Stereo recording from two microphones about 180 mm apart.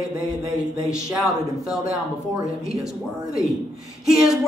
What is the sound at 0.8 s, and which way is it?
A woman's voice, 5° right (ahead or behind).